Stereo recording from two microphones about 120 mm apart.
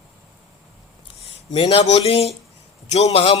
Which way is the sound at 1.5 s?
55° left (ahead or behind).